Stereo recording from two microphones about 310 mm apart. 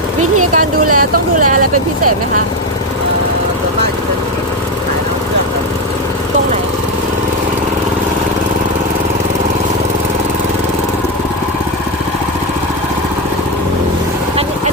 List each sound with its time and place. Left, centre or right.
0.5 s vehicle: right